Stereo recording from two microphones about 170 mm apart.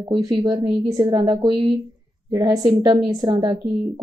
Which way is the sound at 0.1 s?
25° right (ahead or behind).